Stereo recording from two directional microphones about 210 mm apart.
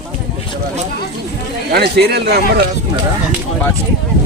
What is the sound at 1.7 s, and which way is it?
Speech, 50° right (ahead or behind).